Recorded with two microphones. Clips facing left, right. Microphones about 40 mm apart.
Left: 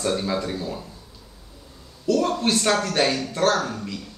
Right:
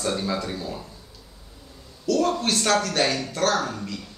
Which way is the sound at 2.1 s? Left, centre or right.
Left.